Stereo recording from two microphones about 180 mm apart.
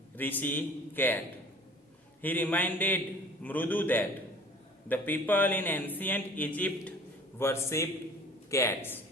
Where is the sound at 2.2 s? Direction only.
10° left (ahead or behind).